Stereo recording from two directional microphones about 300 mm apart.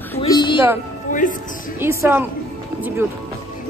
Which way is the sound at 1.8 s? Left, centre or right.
Centre.